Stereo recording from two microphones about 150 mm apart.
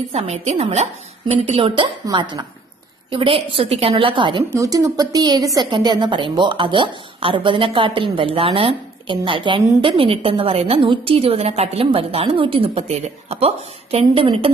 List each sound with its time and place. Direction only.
0.1 s a woman's voice: 45° right (ahead or behind)